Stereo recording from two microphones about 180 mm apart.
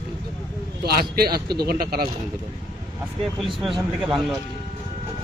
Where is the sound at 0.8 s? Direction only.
60° right (ahead or behind).